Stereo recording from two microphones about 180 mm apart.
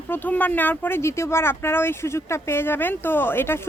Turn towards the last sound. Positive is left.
turn(degrees=15)  # may be behind; listen again after turning